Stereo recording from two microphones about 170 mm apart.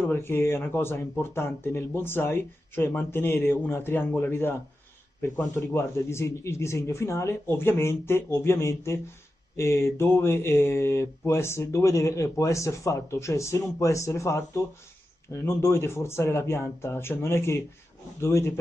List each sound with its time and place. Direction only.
0.0 s speech: 15° left (ahead or behind)
5.6 s speech: 15° left (ahead or behind)